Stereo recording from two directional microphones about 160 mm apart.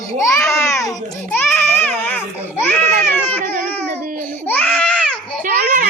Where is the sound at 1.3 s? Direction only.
15° left (ahead or behind).